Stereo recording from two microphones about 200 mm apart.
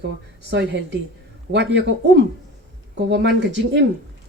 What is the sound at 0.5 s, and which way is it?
Speech, 60° right (ahead or behind).